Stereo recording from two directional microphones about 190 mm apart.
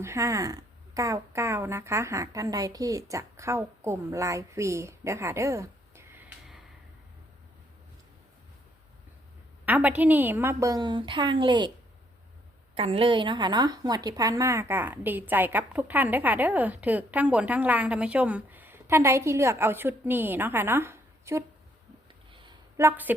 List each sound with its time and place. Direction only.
0.0 s speech: 15° right (ahead or behind)
9.6 s a woman's voice: 10° right (ahead or behind); by 11.7 s 25° right (ahead or behind)
12.7 s a woman's voice: 30° right (ahead or behind); by 21.4 s 15° right (ahead or behind)
22.3 s a sound: 25° right (ahead or behind)
22.8 s a woman's voice: 10° right (ahead or behind)